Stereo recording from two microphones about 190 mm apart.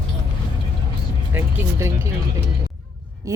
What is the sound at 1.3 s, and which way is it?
Speech, 15° right (ahead or behind).